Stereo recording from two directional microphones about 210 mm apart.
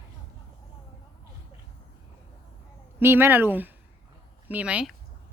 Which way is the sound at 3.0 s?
10° right (ahead or behind).